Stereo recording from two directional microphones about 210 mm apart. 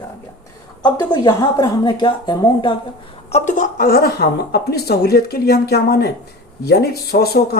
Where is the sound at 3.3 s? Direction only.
35° left (ahead or behind).